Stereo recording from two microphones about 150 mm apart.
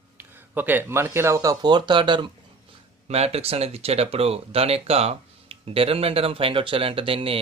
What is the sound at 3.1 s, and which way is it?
Speech, 40° right (ahead or behind).